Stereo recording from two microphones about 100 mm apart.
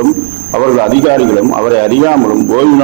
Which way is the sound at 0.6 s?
30° right (ahead or behind).